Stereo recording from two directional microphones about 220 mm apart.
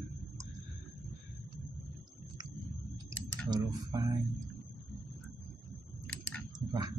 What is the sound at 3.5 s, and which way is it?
Speech, 15° right (ahead or behind).